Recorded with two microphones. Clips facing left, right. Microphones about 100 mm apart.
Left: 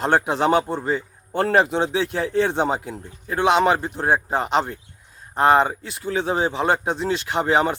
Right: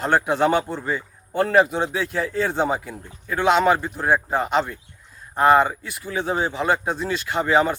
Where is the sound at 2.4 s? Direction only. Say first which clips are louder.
Left 1 dB; 20° left (ahead or behind).